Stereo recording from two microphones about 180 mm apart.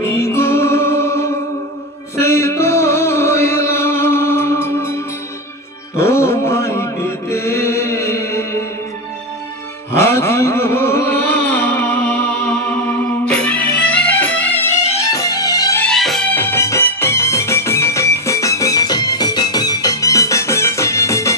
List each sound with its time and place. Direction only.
0.0 s music: 15° left (ahead or behind)
5.9 s chant: 15° left (ahead or behind)
9.9 s a sound: 15° left (ahead or behind)
13.3 s music: 5° left (ahead or behind)
15.8 s music: centre (ahead or behind); by 21.4 s 15° left (ahead or behind)